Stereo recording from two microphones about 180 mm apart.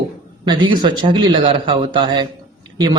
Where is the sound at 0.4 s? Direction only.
25° right (ahead or behind).